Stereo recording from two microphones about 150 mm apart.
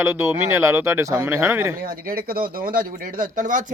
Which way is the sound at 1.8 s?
75° right (ahead or behind).